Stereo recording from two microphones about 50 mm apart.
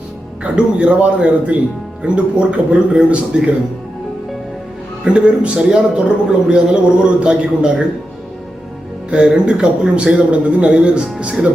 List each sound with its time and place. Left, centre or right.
0.4 s a man's voice: right
5.0 s a man's voice: right
9.0 s a man's voice: centre